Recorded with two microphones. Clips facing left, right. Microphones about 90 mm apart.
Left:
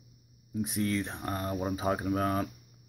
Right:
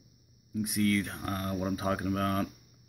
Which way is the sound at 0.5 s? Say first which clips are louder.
Right 2 dB; 30° left (ahead or behind).